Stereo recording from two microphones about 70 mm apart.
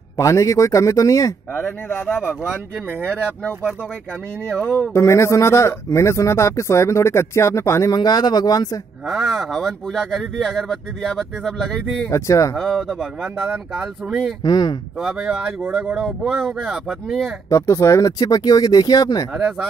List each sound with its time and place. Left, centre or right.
0.2 s speech: left
2.9 s speech: right
4.5 s speech: centre
4.9 s speech: left
7.9 s speech: left
9.0 s speech: centre
12.1 s speech: left
12.5 s speech: centre
13.2 s speech: centre
14.4 s speech: left
15.0 s speech: centre
17.5 s speech: left